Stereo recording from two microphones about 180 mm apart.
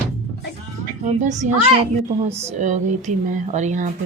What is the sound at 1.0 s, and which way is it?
Speech, 40° right (ahead or behind).